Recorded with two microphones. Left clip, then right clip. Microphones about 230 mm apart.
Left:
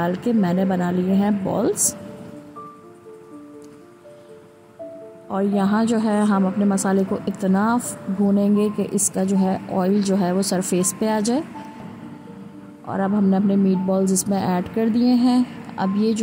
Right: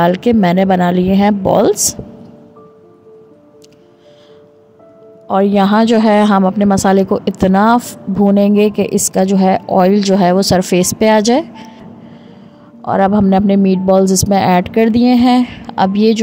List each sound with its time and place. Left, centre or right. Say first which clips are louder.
0.0 s a man's voice: right 11 dB; right
5.3 s a man's voice: right 11 dB; right
12.8 s a man's voice: right 11 dB; right